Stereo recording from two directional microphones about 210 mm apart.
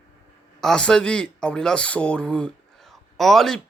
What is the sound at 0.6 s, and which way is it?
Speech, 5° left (ahead or behind).